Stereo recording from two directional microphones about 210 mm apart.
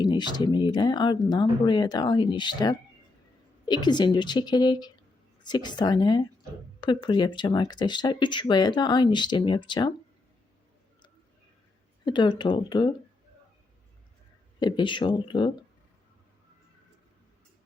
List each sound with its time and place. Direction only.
0.0 s speech: 20° left (ahead or behind)
12.0 s speech: 20° left (ahead or behind)
14.6 s speech: 20° left (ahead or behind)